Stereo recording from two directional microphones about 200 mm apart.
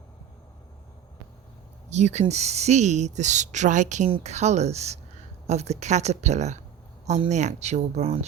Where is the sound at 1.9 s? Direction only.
35° right (ahead or behind).